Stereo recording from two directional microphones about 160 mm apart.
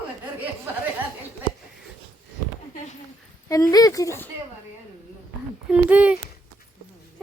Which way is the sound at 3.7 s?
20° left (ahead or behind).